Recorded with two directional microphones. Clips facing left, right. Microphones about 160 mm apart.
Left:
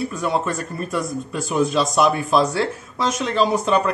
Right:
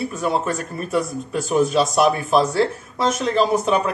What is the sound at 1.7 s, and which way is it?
Speech, 5° right (ahead or behind).